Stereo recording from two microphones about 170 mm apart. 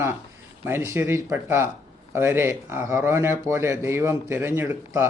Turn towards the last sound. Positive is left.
turn(degrees=-15)  # may be behind; listen again after turning